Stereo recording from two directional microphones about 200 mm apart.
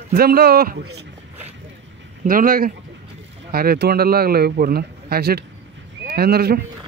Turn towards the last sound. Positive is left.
turn(degrees=-50)  # may be behind; listen again after turning